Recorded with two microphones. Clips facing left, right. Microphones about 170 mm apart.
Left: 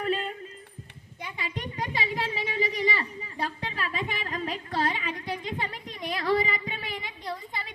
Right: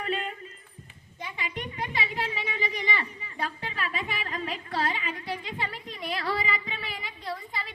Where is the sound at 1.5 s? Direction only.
35° left (ahead or behind).